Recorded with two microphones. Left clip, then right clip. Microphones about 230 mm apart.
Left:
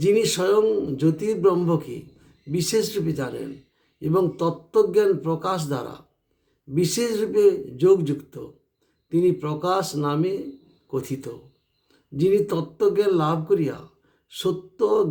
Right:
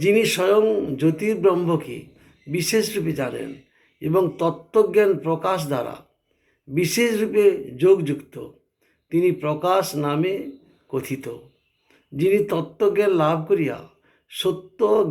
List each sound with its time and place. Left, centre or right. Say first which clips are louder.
0.0 s a man's voice: right 2 dB; left
14.3 s beatboxing: right 2 dB; left